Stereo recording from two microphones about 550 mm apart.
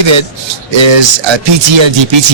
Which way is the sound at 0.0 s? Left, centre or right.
Right.